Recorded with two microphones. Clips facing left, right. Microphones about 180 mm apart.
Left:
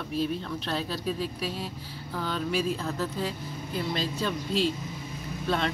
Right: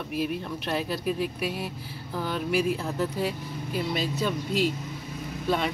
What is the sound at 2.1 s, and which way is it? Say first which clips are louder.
Speech: right 2 dB; 10° right (ahead or behind).